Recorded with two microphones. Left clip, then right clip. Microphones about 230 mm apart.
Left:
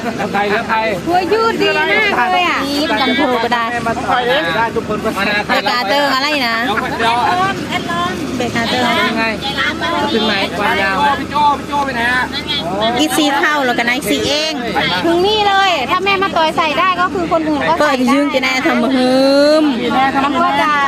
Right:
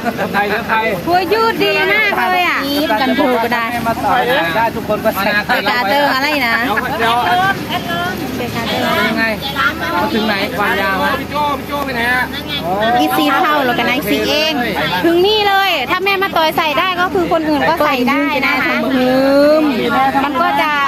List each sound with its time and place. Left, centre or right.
1.1 s speech: right
3.1 s speech: centre
5.6 s speech: centre
13.4 s a woman's voice: left
15.2 s speech: right
19.1 s a woman's voice: left
20.6 s a sound: right